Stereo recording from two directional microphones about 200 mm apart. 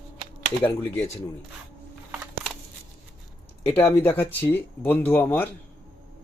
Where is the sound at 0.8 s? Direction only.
10° left (ahead or behind).